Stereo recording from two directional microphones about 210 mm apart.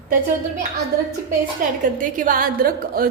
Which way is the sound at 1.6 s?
40° right (ahead or behind).